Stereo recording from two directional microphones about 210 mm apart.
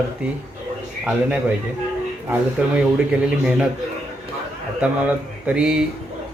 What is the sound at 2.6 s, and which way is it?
Speech, 5° right (ahead or behind).